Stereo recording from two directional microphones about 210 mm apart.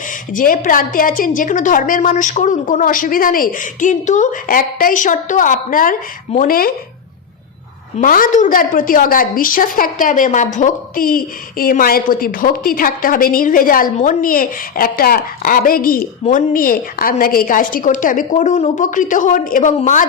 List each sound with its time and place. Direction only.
0.3 s a woman's voice: 40° left (ahead or behind)
7.9 s a woman's voice: 40° left (ahead or behind)